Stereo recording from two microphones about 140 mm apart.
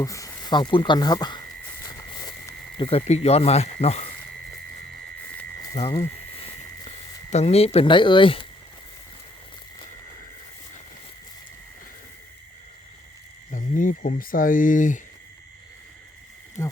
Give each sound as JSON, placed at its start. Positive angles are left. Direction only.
{"t": 0.0, "sound": "speech", "side_deg": 25}
{"t": 1.8, "sound": "a sound", "side_deg": 25}
{"t": 2.8, "sound": "speech", "side_deg": 45}
{"t": 5.7, "sound": "speech", "side_deg": 40}
{"t": 6.3, "sound": "a sound", "side_deg": 40}
{"t": 7.3, "sound": "speech", "side_deg": 50}
{"t": 13.5, "sound": "speech", "side_deg": 70}
{"t": 16.6, "sound": "speech", "side_deg": 20}